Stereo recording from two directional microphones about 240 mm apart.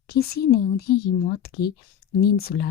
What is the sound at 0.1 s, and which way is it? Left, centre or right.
A woman's voice, left.